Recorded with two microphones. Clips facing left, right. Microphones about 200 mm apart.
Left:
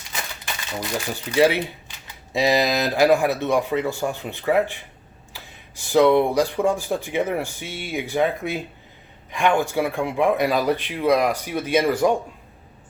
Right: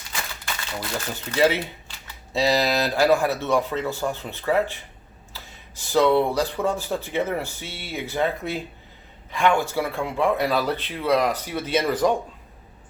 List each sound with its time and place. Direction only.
0.2 s speech: 15° left (ahead or behind)